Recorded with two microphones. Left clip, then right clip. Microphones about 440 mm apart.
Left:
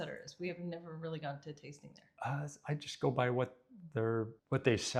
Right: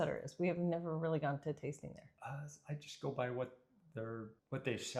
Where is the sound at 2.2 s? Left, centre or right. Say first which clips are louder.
Left 10 dB; left.